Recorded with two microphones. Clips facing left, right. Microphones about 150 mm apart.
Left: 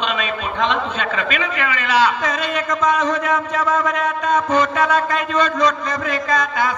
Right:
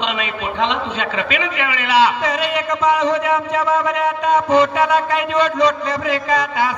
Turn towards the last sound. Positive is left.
turn(degrees=-30)  # may be behind; listen again after turning